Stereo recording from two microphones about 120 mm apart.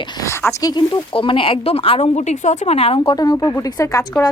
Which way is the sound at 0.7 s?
40° left (ahead or behind).